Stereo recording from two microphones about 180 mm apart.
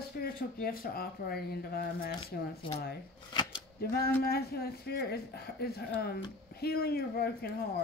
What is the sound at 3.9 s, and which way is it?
Speech, 60° left (ahead or behind).